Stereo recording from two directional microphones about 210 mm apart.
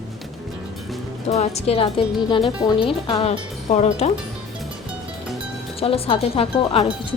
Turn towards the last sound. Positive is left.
turn(degrees=30)  # may be behind; listen again after turning